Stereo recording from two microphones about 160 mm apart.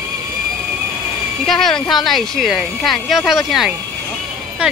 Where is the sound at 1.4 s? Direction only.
Centre (ahead or behind).